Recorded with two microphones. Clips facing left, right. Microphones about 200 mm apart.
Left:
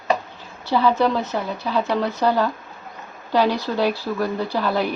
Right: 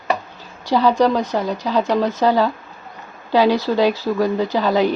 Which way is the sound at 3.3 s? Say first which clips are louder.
Right 4 dB; 10° right (ahead or behind).